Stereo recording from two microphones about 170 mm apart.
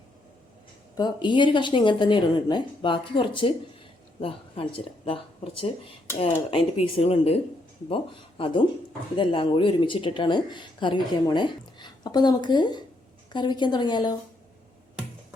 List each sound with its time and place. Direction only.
0.9 s speech: 25° left (ahead or behind)
8.4 s speech: 30° left (ahead or behind)